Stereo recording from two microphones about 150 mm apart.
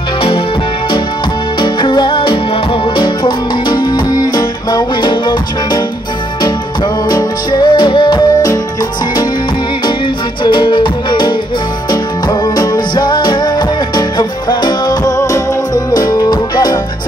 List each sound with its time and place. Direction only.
1.6 s music: 30° left (ahead or behind)
10.4 s music: 30° left (ahead or behind)